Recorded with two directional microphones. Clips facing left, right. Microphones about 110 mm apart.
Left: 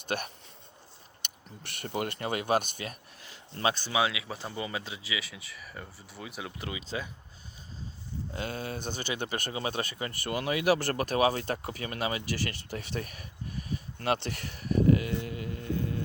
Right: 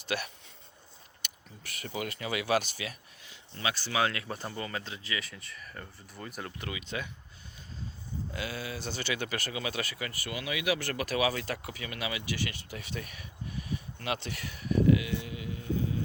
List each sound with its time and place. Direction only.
0.1 s speech: 45° left (ahead or behind)
1.8 s speech: 50° left (ahead or behind)
3.8 s speech: 15° left (ahead or behind)
6.6 s speech: 25° left (ahead or behind)
8.4 s speech: 50° left (ahead or behind)
9.1 s speech: 30° left (ahead or behind); by 16.0 s 55° left (ahead or behind)